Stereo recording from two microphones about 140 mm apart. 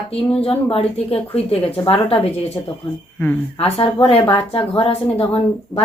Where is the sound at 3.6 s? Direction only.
40° left (ahead or behind).